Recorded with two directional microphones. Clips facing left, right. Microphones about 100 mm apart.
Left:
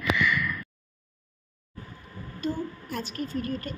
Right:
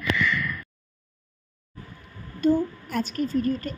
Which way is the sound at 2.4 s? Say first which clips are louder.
Right 9 dB; 50° right (ahead or behind).